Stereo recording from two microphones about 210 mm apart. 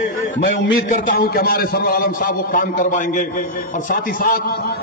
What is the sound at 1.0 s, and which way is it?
A man's voice, 45° left (ahead or behind).